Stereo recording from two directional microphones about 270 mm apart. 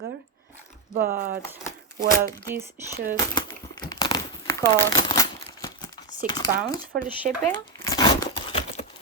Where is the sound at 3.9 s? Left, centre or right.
Centre.